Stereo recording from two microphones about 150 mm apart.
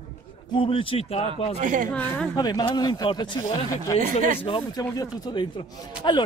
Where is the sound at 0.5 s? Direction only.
35° left (ahead or behind).